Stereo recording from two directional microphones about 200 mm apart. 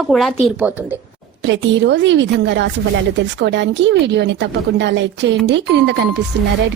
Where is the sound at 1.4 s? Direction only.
65° right (ahead or behind).